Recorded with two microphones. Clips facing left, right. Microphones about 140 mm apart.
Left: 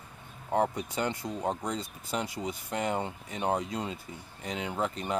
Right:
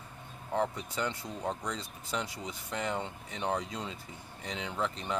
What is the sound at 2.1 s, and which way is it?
Speech, 10° left (ahead or behind).